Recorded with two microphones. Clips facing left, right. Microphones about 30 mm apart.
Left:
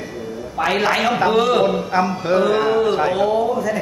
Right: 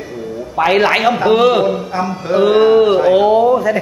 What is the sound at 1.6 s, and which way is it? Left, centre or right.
Speech, centre.